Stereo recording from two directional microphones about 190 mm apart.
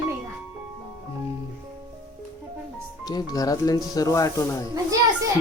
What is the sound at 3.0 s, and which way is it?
Speech, 20° left (ahead or behind).